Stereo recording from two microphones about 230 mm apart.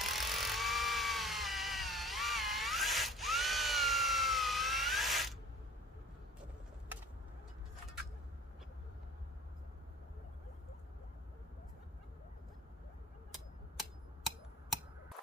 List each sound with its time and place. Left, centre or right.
0.0 s tools: centre